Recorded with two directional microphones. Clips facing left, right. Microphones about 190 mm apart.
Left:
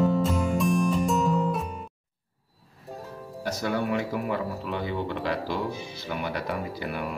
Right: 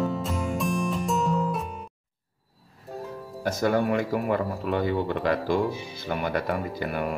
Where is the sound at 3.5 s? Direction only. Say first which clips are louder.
Right 4 dB; 50° right (ahead or behind).